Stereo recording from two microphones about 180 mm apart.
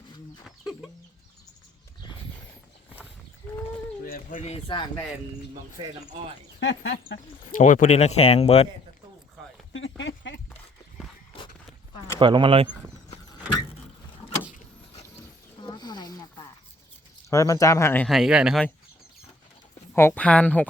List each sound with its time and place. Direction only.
0.4 s chicken: centre (ahead or behind)
4.0 s speech: 45° left (ahead or behind); by 4.9 s 30° left (ahead or behind)
5.8 s speech: 25° right (ahead or behind)
6.6 s speech: 90° left
7.6 s speech: 45° left (ahead or behind)
10.0 s a sound: 90° left
12.2 s speech: 25° right (ahead or behind)
15.6 s a sound: 25° left (ahead or behind)
17.2 s speech: 20° left (ahead or behind)
18.1 s speech: centre (ahead or behind)
19.9 s speech: 10° left (ahead or behind)